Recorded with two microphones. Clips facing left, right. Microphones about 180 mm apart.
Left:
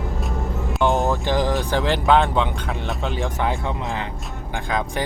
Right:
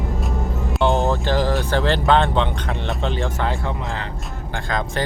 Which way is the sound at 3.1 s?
15° left (ahead or behind).